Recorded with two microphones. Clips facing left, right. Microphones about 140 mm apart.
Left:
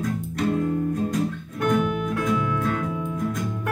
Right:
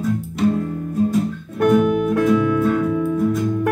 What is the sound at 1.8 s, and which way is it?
Music, 50° right (ahead or behind).